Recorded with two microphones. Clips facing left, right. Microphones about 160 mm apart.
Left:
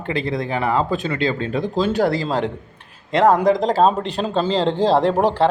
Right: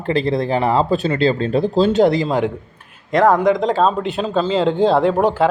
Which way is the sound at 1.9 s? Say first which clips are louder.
Right 4 dB; 20° right (ahead or behind).